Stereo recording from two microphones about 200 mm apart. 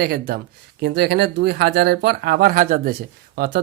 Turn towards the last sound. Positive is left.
turn(degrees=-50)  # may be behind; listen again after turning